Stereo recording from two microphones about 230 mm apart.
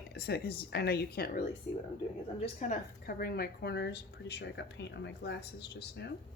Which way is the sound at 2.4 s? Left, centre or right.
Left.